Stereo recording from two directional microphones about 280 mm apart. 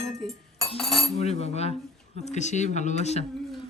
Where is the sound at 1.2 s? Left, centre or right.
Left.